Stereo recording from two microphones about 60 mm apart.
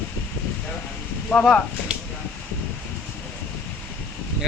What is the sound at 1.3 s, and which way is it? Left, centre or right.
Speech, left.